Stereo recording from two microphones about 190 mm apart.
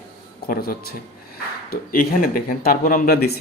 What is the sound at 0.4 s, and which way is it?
Speech, 50° left (ahead or behind).